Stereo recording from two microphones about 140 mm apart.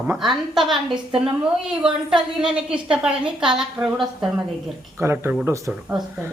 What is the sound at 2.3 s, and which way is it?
A woman's voice, 5° right (ahead or behind).